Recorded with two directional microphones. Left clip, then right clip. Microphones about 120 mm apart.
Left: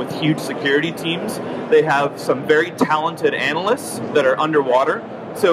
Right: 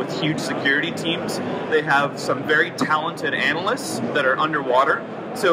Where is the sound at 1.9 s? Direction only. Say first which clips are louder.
Left 2 dB; 15° left (ahead or behind).